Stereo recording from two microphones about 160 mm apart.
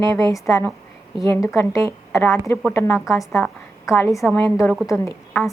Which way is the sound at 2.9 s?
Centre (ahead or behind).